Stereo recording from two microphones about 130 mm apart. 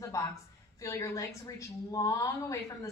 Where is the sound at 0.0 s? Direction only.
25° left (ahead or behind).